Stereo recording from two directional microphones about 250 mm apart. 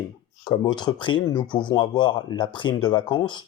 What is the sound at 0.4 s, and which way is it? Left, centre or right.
Speech, centre.